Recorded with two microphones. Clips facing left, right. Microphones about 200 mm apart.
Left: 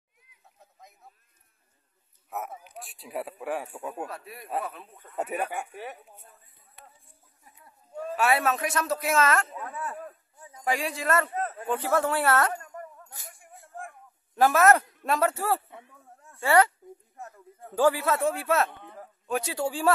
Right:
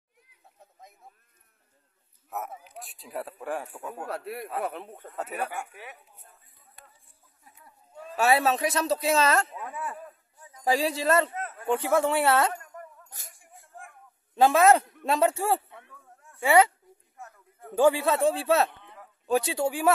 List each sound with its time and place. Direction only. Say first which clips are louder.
2.2 s speech: even; centre (ahead or behind)
4.1 s speech: right 1 dB; 65° right (ahead or behind)
5.1 s speech: left 3 dB; 20° left (ahead or behind)
8.2 s a man's voice: right 2 dB; 30° right (ahead or behind)
9.6 s speech: even; 10° right (ahead or behind)
10.6 s a man's voice: right 4 dB; 35° right (ahead or behind)
11.3 s a sound: left 5 dB; 35° left (ahead or behind)
11.6 s a man's voice: right 3 dB; 20° right (ahead or behind)
13.4 s a sound: left 6 dB; 50° left (ahead or behind)
14.3 s a man's voice: right 1 dB; 20° right (ahead or behind)
17.7 s a man's voice: right 2 dB; 25° right (ahead or behind)
18.7 s a sound: left 5 dB; 50° left (ahead or behind)
19.4 s speech: right 2 dB; 15° right (ahead or behind)